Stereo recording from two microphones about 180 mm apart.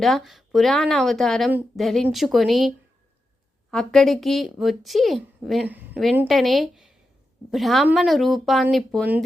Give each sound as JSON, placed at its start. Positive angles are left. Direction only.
{"t": 0.0, "sound": "a woman's voice", "side_deg": 0}